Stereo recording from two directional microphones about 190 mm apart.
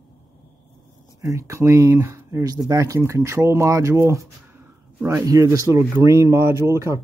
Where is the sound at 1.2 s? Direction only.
15° right (ahead or behind).